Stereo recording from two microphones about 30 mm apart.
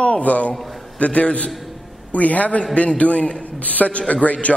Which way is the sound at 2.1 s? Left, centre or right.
Left.